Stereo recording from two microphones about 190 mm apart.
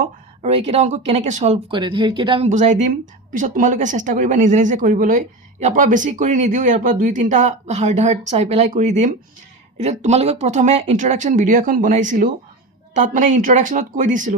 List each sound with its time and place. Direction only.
0.0 s speech: 35° right (ahead or behind)
2.5 s speech: 40° right (ahead or behind)